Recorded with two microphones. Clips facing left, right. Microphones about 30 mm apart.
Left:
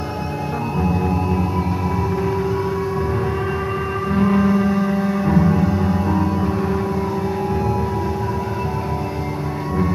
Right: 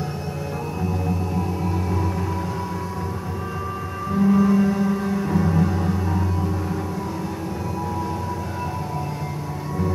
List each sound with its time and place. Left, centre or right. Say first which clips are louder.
0.7 s music: left 6 dB; left
4.1 s music: left 1 dB; left